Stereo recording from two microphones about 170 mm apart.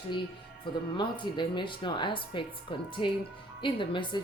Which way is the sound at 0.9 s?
25° left (ahead or behind).